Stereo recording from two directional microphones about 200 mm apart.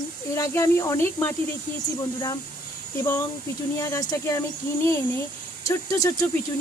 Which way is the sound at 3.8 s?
15° left (ahead or behind).